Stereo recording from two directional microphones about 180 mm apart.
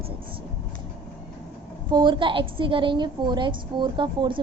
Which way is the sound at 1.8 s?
25° right (ahead or behind).